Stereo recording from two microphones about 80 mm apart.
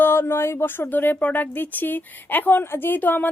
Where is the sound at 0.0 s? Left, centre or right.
Left.